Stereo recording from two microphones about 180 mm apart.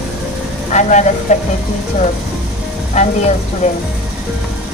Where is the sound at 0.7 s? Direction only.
40° left (ahead or behind).